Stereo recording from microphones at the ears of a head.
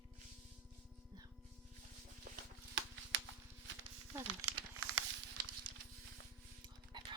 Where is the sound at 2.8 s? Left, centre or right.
Right.